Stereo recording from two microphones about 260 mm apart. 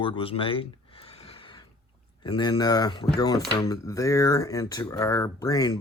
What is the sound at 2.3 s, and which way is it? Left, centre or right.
Speech, centre.